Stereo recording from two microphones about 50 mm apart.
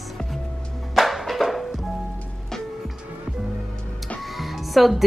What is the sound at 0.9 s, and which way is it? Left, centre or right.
Music, centre.